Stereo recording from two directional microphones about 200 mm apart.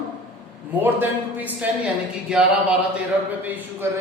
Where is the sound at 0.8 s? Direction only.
10° right (ahead or behind).